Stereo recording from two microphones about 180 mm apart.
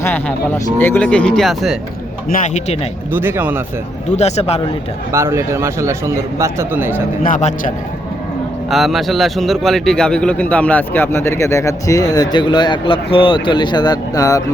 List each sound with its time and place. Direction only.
0.0 s a man's voice: 10° left (ahead or behind)
2.3 s a man's voice: 40° left (ahead or behind)
3.1 s speech: 10° right (ahead or behind)
4.2 s a man's voice: 35° left (ahead or behind)
5.1 s speech: 15° right (ahead or behind)
7.3 s a man's voice: 45° left (ahead or behind)
8.7 s a man's voice: centre (ahead or behind); by 14.4 s 20° left (ahead or behind)